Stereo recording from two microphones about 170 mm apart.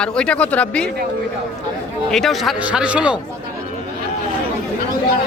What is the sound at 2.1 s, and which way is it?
Speech, centre (ahead or behind).